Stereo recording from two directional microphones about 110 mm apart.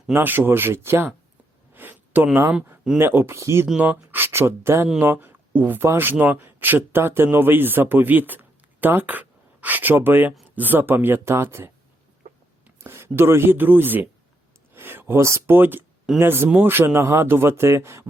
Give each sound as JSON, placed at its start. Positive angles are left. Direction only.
{"t": 0.1, "sound": "a man's voice", "side_deg": -20}
{"t": 1.7, "sound": "a sound", "side_deg": -15}
{"t": 3.0, "sound": "a man's voice", "side_deg": -20}
{"t": 3.7, "sound": "a man's voice", "side_deg": -10}
{"t": 12.8, "sound": "a man's voice", "side_deg": -20}